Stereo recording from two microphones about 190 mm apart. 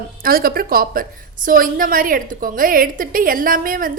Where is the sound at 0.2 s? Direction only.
50° right (ahead or behind).